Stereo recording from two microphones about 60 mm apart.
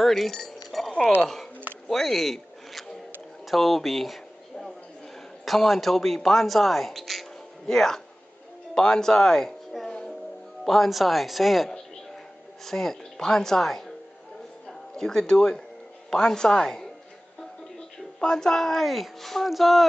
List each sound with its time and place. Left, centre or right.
0.0 s chink: centre
1.2 s speech: centre
1.9 s a sound: centre
5.4 s speech: centre
9.8 s music: centre
10.6 s a woman's voice: centre